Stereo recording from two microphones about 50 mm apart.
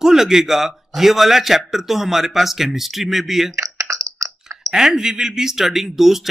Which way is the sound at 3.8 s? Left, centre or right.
Right.